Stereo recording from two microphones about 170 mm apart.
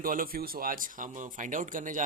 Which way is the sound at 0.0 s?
55° right (ahead or behind).